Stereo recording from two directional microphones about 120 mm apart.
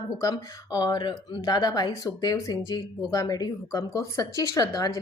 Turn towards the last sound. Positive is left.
turn(degrees=30)  # may be behind; listen again after turning